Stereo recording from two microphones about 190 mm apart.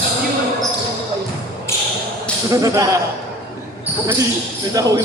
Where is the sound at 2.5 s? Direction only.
15° right (ahead or behind).